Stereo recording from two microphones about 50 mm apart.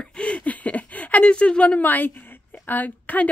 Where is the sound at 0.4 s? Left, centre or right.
Left.